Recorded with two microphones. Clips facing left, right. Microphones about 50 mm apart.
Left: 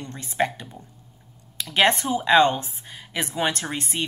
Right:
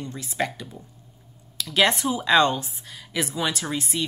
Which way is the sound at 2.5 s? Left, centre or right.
Left.